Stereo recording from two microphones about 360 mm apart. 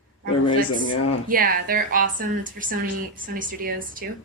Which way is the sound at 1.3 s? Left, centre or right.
Right.